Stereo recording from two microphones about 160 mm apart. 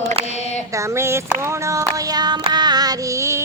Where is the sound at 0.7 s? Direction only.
15° right (ahead or behind).